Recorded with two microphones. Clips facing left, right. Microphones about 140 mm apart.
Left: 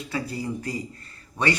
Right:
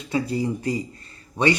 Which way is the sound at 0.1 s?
20° right (ahead or behind).